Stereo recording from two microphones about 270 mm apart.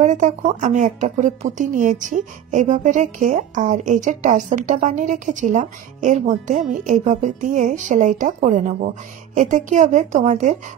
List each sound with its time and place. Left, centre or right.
0.0 s a woman's voice: right